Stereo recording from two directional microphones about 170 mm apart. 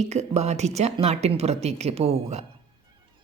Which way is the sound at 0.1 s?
40° right (ahead or behind).